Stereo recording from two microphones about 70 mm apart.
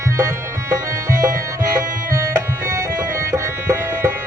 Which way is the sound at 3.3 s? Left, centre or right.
Right.